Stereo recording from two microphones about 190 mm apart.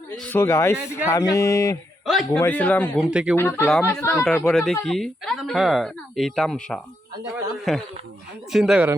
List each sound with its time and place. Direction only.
0.2 s speech: 10° left (ahead or behind)
2.0 s speech: centre (ahead or behind)
3.0 s speech: 5° right (ahead or behind)
3.3 s speech: 10° left (ahead or behind); by 8.9 s 5° right (ahead or behind)